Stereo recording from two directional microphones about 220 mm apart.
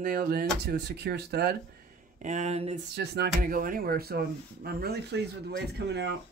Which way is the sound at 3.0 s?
45° right (ahead or behind).